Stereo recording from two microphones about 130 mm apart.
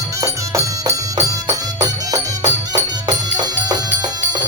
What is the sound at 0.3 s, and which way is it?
Music, 25° right (ahead or behind).